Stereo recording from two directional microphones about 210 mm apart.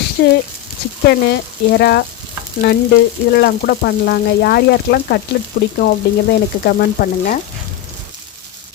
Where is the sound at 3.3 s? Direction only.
45° left (ahead or behind).